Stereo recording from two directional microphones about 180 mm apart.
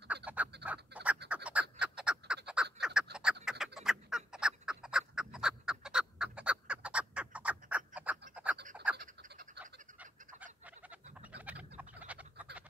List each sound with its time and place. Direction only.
0.1 s fowl: 10° right (ahead or behind)
0.7 s bird: 5° right (ahead or behind)
1.3 s frog: 5° right (ahead or behind)
3.4 s fowl: centre (ahead or behind)
8.9 s frog: 60° right (ahead or behind)
9.9 s bird: 10° right (ahead or behind)
11.1 s frog: 10° right (ahead or behind)